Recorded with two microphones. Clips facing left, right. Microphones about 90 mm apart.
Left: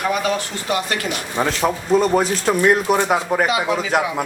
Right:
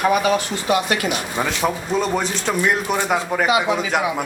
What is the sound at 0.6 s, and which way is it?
Speech, 15° right (ahead or behind).